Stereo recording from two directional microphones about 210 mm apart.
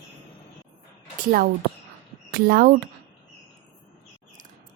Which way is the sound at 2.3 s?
45° right (ahead or behind).